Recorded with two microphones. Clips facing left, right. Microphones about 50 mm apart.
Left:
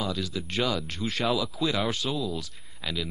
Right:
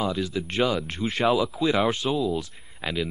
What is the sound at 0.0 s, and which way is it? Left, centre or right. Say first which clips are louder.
Speech: right 4 dB; right.